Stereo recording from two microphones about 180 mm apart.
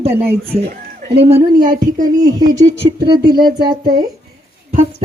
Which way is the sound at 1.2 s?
35° right (ahead or behind).